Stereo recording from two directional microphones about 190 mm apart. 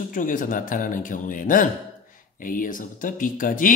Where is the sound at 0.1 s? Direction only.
45° left (ahead or behind).